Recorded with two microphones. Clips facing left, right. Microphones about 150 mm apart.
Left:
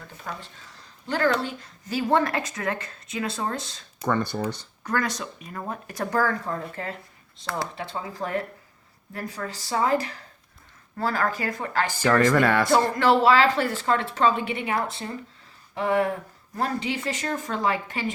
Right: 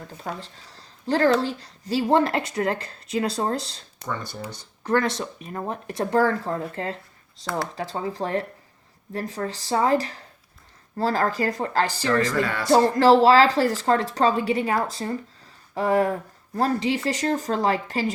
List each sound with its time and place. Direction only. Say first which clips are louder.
0.3 s speech: right 3 dB; 35° right (ahead or behind)
4.0 s speech: left 7 dB; 60° left (ahead or behind)
4.8 s speech: right 5 dB; 25° right (ahead or behind)
12.3 s speech: left 5 dB; 65° left (ahead or behind)
12.7 s speech: right 8 dB; 35° right (ahead or behind)
15.7 s a sound: right 2 dB; 35° right (ahead or behind)
16.6 s speech: right 5 dB; 35° right (ahead or behind)